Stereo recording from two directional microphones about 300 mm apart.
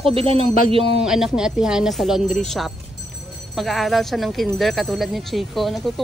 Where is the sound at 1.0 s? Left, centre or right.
Centre.